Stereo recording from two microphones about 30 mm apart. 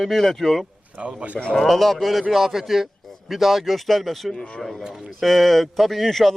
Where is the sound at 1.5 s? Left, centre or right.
Centre.